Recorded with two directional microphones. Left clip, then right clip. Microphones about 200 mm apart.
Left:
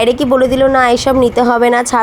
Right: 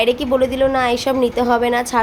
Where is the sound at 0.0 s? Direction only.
30° left (ahead or behind).